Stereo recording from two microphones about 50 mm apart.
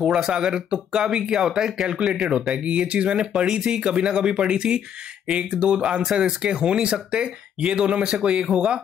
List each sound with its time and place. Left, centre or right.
0.0 s speech: centre